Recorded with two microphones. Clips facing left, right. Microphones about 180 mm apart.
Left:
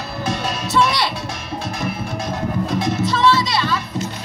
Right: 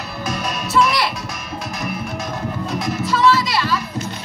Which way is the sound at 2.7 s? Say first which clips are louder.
Right 1 dB; 25° left (ahead or behind).